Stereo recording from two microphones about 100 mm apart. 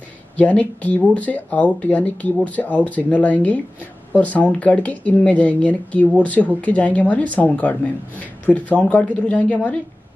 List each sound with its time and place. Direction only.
0.4 s speech: 15° left (ahead or behind)